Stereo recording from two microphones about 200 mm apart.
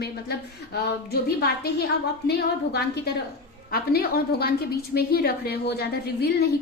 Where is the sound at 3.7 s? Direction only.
50° left (ahead or behind).